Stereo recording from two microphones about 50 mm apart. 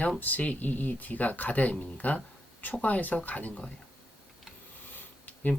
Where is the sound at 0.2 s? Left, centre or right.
Left.